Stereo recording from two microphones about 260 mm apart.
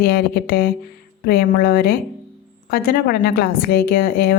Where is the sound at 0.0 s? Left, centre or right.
Left.